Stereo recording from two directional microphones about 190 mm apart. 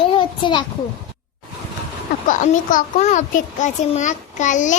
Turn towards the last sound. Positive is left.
turn(degrees=40)  # may be behind; listen again after turning